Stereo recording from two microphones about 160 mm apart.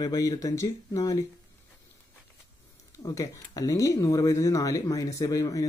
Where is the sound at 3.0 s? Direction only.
20° left (ahead or behind).